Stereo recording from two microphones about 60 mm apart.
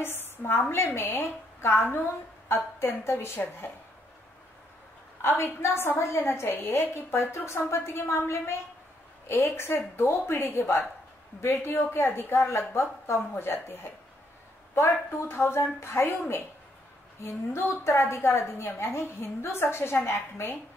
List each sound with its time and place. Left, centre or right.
0.0 s a woman's voice: left
5.2 s a woman's voice: left
14.8 s a woman's voice: left